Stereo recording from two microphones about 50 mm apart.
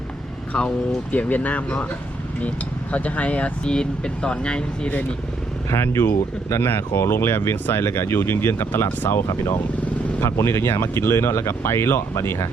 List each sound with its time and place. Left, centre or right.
1.1 s speech: left
2.9 s speech: left
3.7 s speech: centre
5.7 s speech: left
7.9 s speech: left
9.0 s speech: left
9.2 s speech: left